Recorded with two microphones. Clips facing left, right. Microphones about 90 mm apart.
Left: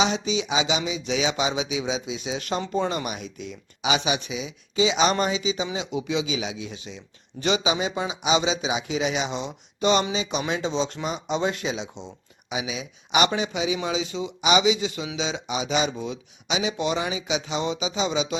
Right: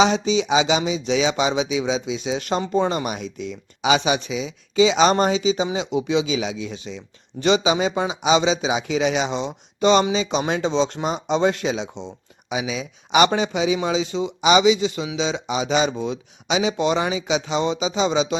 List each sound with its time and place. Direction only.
0.0 s speech: 35° right (ahead or behind)
2.6 s speech: 50° right (ahead or behind)
2.9 s speech: 30° right (ahead or behind)
3.2 s speech: 90° right
3.8 s speech: 40° right (ahead or behind)
5.7 s speech: 25° right (ahead or behind)
6.9 s speech: 90° right
7.4 s speech: 35° right (ahead or behind)
10.8 s speech: 70° right (ahead or behind)
11.0 s speech: 35° right (ahead or behind)